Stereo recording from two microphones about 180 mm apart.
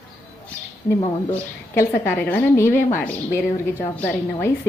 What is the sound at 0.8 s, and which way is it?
A woman's voice, 15° left (ahead or behind).